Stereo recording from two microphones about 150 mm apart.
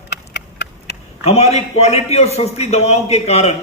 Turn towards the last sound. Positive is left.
turn(degrees=45)  # may be behind; listen again after turning